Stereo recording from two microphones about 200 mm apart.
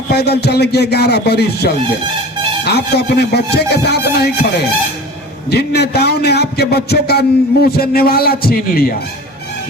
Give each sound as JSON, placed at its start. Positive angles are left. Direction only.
{"t": 0.1, "sound": "a man's voice", "side_deg": 55}
{"t": 5.5, "sound": "a man's voice", "side_deg": 55}